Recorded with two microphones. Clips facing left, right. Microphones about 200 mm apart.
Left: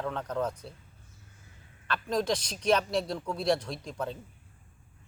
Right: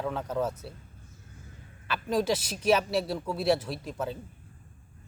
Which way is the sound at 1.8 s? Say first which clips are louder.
Right 2 dB; 5° right (ahead or behind).